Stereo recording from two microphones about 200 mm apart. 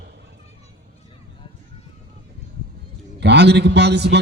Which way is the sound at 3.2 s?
55° right (ahead or behind).